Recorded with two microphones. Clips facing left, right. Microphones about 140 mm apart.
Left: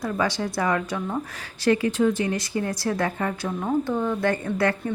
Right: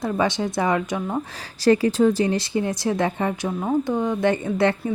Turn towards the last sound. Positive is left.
turn(degrees=-25)  # may be behind; listen again after turning